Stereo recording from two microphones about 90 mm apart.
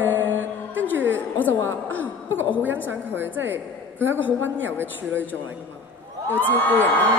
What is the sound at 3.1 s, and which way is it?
A woman's voice, 25° right (ahead or behind).